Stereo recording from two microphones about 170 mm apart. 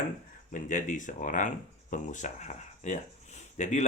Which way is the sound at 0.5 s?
50° left (ahead or behind).